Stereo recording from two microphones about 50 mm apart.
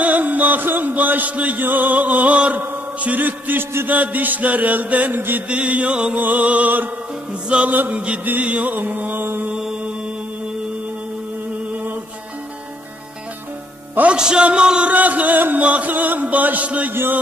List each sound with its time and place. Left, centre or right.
0.0 s music: right
1.6 s chant: right
5.5 s mantra: right
6.1 s chant: right
7.4 s mantra: right
7.7 s chant: right
14.0 s a man's voice: centre
14.9 s chant: right